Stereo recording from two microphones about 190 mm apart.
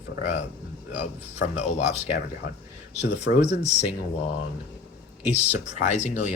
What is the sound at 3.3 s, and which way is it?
Speech, 65° left (ahead or behind).